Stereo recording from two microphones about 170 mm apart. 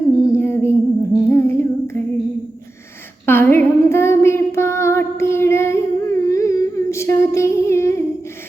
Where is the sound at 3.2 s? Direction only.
10° left (ahead or behind).